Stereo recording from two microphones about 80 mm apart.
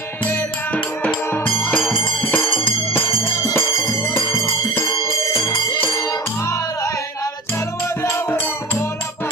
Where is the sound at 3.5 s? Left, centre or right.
Left.